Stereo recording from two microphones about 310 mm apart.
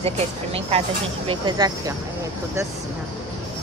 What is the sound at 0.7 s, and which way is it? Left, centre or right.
Speech, centre.